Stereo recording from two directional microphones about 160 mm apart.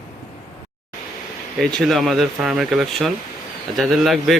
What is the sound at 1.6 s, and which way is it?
Speech, centre (ahead or behind).